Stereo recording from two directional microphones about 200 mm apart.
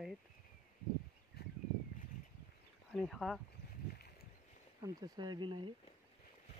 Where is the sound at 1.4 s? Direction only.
55° left (ahead or behind).